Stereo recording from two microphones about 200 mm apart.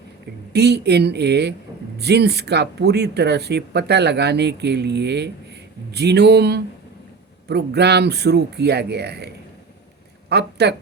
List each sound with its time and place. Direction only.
0.5 s speech: 55° right (ahead or behind)